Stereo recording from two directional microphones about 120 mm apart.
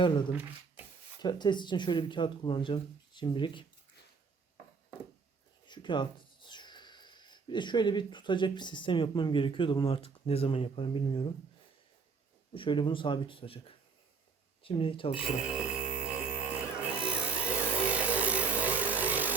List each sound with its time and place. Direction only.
1.2 s speech: 35° left (ahead or behind)
5.6 s speech: 40° left (ahead or behind)
12.5 s speech: 45° left (ahead or behind)
15.2 s a sound: 5° right (ahead or behind)